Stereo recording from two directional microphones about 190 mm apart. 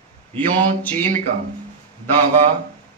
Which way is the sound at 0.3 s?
10° left (ahead or behind).